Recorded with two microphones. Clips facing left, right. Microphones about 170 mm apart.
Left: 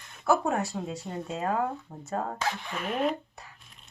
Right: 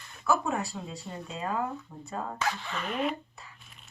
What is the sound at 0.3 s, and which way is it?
Speech, 50° left (ahead or behind).